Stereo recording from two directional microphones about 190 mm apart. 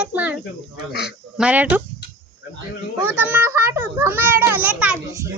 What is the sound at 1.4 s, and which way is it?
Speech, 5° right (ahead or behind).